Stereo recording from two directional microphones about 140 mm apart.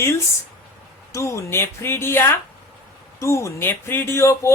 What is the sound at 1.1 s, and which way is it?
Speech, 20° left (ahead or behind).